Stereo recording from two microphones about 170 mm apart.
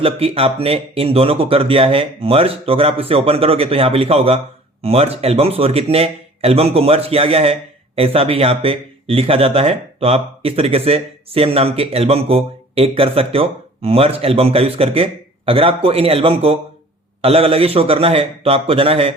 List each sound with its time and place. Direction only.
0.0 s a man's voice: 35° right (ahead or behind)